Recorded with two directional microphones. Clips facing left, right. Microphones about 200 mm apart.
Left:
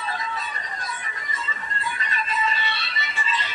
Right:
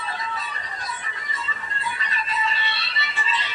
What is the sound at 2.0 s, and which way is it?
Music, 45° left (ahead or behind).